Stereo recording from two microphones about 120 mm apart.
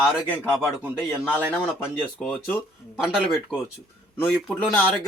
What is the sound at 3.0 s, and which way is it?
Speech, 5° right (ahead or behind).